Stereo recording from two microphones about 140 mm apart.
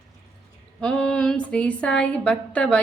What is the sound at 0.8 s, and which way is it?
Speech, 5° left (ahead or behind).